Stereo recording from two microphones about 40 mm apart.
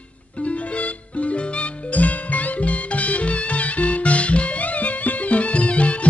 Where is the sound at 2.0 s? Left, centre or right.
Left.